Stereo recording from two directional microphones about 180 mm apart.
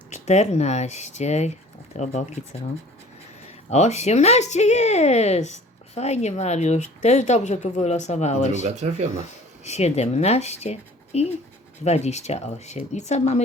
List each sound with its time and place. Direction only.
0.1 s speech: 40° left (ahead or behind)
8.6 s speech: 40° right (ahead or behind)
9.6 s speech: 35° left (ahead or behind)